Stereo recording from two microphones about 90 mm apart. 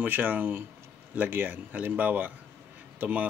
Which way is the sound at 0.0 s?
20° right (ahead or behind).